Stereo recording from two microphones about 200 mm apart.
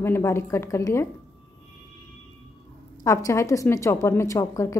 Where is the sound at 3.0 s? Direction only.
15° left (ahead or behind).